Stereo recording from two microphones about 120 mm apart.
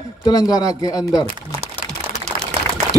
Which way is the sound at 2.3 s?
20° right (ahead or behind).